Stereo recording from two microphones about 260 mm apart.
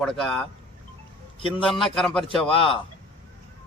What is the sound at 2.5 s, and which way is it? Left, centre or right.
Speech, centre.